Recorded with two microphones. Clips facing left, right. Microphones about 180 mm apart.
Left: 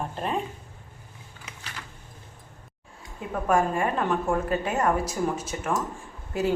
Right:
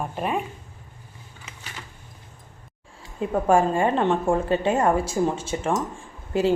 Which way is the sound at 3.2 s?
30° right (ahead or behind).